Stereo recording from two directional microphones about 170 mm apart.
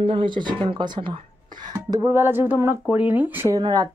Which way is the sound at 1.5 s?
50° right (ahead or behind).